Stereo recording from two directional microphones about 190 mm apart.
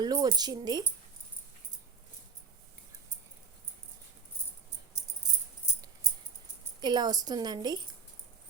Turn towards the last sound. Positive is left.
turn(degrees=-20)  # may be behind; listen again after turning